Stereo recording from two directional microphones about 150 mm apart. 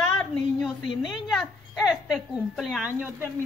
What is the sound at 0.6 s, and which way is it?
A woman's voice, centre (ahead or behind).